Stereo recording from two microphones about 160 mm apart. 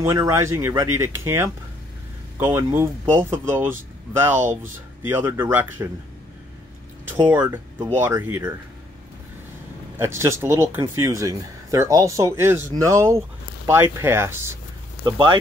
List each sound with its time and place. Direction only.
0.0 s speech: 20° right (ahead or behind)
7.1 s speech: 15° right (ahead or behind)
9.9 s speech: 15° right (ahead or behind)
15.0 s speech: 30° right (ahead or behind)